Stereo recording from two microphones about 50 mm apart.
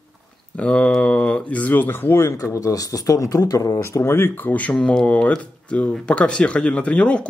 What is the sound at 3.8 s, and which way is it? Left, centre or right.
Speech, left.